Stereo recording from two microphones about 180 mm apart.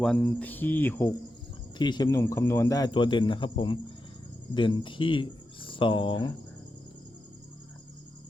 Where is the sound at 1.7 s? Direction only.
25° left (ahead or behind).